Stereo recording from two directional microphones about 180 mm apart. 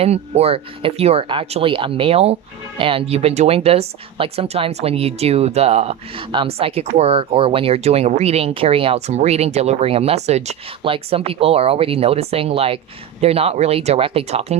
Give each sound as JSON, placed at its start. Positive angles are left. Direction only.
{"t": 0.0, "sound": "speech", "side_deg": -35}